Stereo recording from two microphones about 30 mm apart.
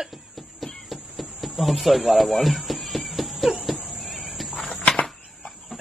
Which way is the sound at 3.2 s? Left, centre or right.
Centre.